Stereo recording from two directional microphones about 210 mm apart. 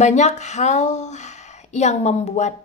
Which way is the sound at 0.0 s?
35° left (ahead or behind).